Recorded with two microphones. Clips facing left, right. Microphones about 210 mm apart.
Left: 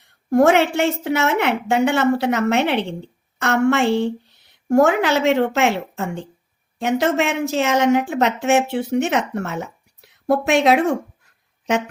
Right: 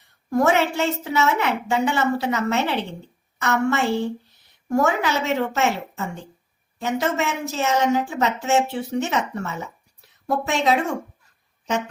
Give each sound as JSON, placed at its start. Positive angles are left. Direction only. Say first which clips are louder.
{"t": 0.3, "sound": "a woman's voice", "louder": "left 5 dB", "side_deg": 70}